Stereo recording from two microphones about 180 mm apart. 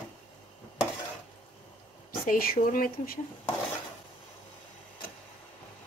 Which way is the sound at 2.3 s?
50° left (ahead or behind).